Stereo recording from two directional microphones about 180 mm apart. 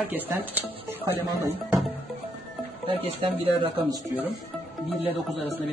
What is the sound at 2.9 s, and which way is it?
Speech, 35° right (ahead or behind).